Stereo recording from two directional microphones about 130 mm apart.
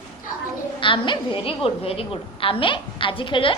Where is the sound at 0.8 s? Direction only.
40° left (ahead or behind).